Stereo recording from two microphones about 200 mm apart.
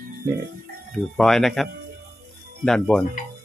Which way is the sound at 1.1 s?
Centre (ahead or behind).